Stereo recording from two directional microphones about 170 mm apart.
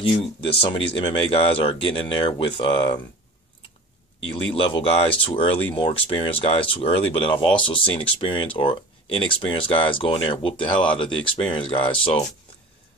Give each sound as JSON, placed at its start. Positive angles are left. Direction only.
{"t": 0.0, "sound": "speech", "side_deg": 30}
{"t": 4.2, "sound": "speech", "side_deg": 30}